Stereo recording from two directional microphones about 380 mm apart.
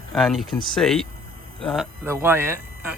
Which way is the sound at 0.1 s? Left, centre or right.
Centre.